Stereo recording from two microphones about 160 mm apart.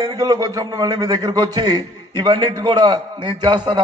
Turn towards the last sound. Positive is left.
turn(degrees=-30)  # may be behind; listen again after turning